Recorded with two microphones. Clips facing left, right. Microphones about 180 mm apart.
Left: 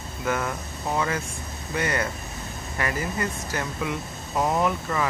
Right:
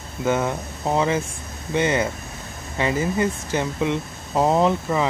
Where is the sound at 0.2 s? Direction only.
25° right (ahead or behind).